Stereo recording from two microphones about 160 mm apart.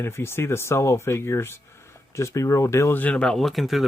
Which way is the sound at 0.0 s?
15° left (ahead or behind).